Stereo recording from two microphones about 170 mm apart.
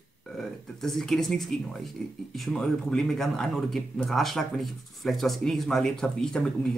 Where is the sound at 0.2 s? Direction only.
Centre (ahead or behind).